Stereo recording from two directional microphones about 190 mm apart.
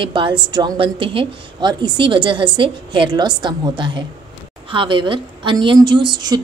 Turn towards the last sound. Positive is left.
turn(degrees=-20)  # may be behind; listen again after turning